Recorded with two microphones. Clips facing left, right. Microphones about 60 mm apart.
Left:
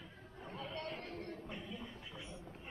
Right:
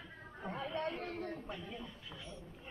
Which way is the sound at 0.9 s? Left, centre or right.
Right.